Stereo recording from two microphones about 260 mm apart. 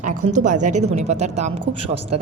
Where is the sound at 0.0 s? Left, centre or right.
Right.